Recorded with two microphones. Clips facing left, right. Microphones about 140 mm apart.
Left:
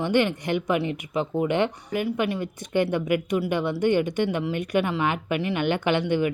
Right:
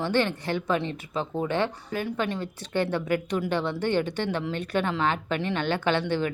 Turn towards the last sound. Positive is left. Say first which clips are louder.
# left 3 dB
turn(degrees=15)  # may be behind; listen again after turning